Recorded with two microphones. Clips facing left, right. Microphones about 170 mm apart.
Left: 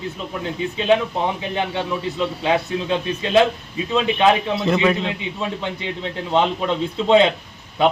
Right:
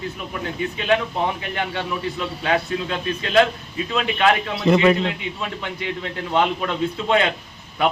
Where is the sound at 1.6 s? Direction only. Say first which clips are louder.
Left 3 dB; 20° left (ahead or behind).